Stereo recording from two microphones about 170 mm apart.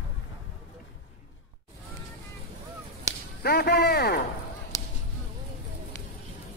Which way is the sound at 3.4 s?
65° left (ahead or behind).